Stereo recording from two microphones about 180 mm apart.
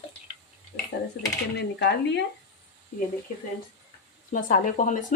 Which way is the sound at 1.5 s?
70° left (ahead or behind).